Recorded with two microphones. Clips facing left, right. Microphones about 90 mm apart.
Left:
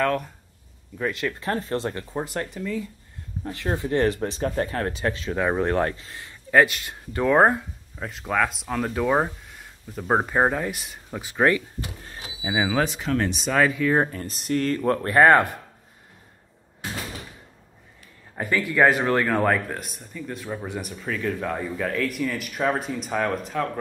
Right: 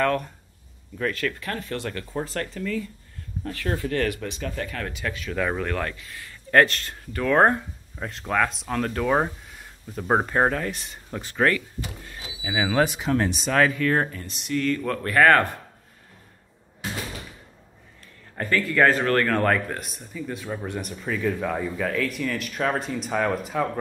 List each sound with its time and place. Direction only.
0.0 s speech: 5° left (ahead or behind)
0.9 s speech: 15° left (ahead or behind)
6.5 s speech: 10° left (ahead or behind)
7.1 s speech: 20° left (ahead or behind)
7.3 s speech: 5° left (ahead or behind)
12.5 s speech: 5° left (ahead or behind)
12.8 s speech: 10° right (ahead or behind)
13.3 s speech: centre (ahead or behind)
14.1 s speech: 40° left (ahead or behind); by 15.4 s 25° left (ahead or behind)
18.3 s speech: 10° left (ahead or behind); by 23.7 s 5° right (ahead or behind)